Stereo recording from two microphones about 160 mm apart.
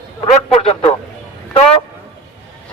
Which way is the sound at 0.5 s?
40° left (ahead or behind).